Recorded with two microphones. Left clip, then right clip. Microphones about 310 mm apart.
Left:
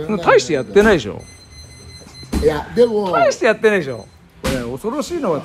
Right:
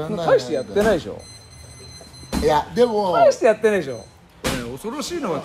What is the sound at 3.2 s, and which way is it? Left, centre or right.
Speech, left.